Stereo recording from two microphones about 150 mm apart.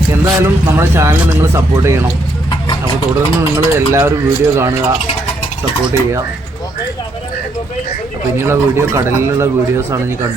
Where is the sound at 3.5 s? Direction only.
20° right (ahead or behind).